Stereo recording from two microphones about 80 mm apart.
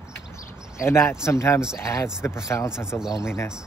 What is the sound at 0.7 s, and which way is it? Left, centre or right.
Speech, left.